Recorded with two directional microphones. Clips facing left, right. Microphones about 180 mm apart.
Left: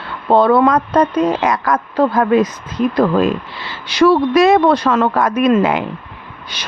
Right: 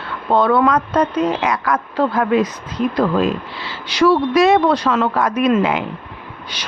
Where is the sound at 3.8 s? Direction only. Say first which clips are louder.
Left 3 dB; 50° left (ahead or behind).